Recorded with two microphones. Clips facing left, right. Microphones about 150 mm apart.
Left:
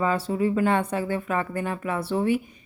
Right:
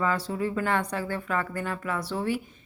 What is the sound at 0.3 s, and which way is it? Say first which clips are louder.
Speech: left 5 dB; 20° left (ahead or behind).